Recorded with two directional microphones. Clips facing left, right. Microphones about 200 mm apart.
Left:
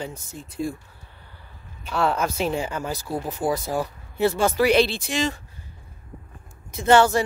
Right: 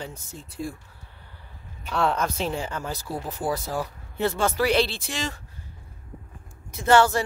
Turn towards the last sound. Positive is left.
turn(degrees=20)  # may be behind; listen again after turning